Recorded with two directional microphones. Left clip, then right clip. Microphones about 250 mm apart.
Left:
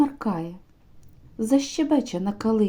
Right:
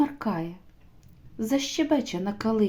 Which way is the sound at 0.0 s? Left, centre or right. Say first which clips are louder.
Left 3 dB; centre.